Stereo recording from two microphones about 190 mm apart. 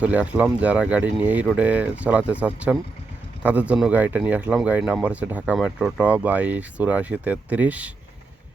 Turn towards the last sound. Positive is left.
turn(degrees=-10)  # may be behind; listen again after turning